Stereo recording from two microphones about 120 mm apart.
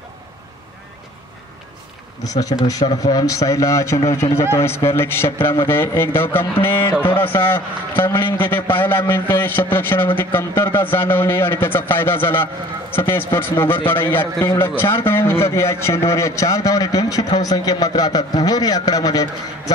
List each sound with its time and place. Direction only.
2.2 s a man's voice: 30° left (ahead or behind)